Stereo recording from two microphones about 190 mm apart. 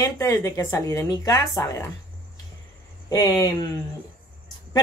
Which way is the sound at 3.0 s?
20° left (ahead or behind).